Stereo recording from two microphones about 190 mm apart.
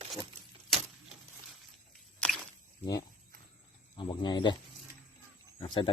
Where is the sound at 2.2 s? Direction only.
5° left (ahead or behind).